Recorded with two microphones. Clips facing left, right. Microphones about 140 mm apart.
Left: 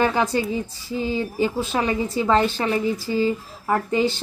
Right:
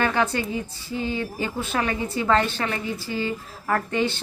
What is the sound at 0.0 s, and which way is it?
Speech, 10° left (ahead or behind).